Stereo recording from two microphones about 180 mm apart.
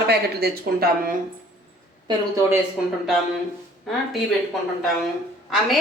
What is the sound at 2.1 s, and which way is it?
Speech, 15° right (ahead or behind).